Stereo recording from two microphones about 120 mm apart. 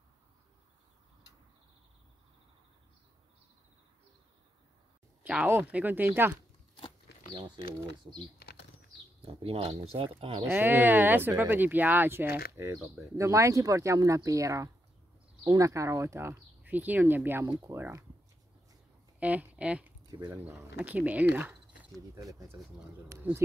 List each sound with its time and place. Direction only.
5.2 s speech: 10° right (ahead or behind)
7.3 s speech: 40° right (ahead or behind)
9.2 s speech: 50° right (ahead or behind)
10.4 s speech: 15° right (ahead or behind)
19.1 s speech: 10° right (ahead or behind)
20.1 s speech: 35° right (ahead or behind)
20.8 s speech: 10° right (ahead or behind)
22.1 s speech: 30° right (ahead or behind)